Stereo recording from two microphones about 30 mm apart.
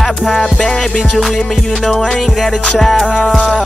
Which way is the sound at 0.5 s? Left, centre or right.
Centre.